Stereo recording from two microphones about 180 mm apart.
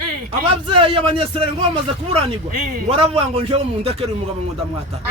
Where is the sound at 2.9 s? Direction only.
35° right (ahead or behind).